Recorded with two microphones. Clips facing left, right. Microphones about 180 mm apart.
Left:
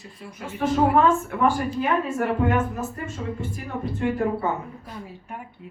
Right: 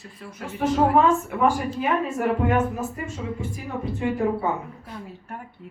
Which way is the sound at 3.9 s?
15° right (ahead or behind).